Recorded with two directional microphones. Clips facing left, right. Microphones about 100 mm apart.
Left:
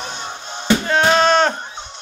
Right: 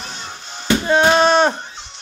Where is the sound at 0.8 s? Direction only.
15° right (ahead or behind).